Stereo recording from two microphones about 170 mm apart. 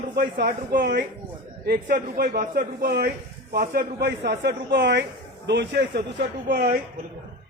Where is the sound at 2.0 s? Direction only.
50° right (ahead or behind); by 6.7 s 70° right (ahead or behind).